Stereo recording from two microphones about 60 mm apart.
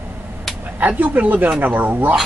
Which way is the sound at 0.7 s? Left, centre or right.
Right.